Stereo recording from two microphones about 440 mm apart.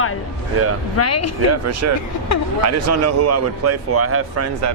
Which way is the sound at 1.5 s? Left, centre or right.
Right.